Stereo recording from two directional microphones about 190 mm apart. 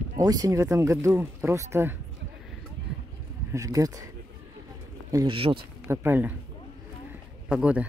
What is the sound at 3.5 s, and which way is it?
Speech, 15° right (ahead or behind).